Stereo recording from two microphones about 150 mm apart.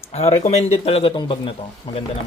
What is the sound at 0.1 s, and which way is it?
Speech, 45° left (ahead or behind).